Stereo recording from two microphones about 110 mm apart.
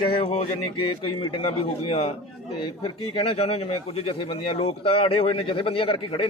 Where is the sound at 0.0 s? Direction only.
50° left (ahead or behind).